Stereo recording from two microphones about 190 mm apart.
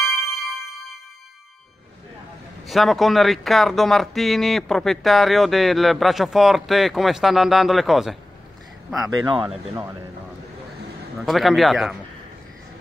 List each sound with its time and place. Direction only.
0.0 s music: centre (ahead or behind)
2.6 s speech: centre (ahead or behind)
9.2 s speech: 25° right (ahead or behind)
11.2 s speech: centre (ahead or behind)